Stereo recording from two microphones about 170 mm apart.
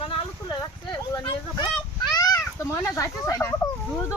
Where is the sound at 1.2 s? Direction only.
30° left (ahead or behind).